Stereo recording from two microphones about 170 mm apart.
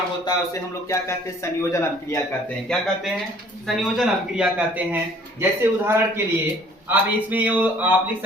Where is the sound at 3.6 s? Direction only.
Centre (ahead or behind).